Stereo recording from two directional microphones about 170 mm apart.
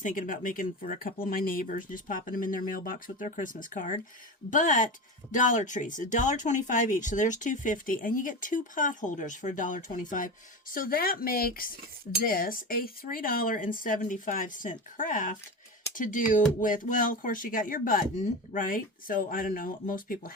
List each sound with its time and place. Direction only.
0.0 s speech: 50° left (ahead or behind)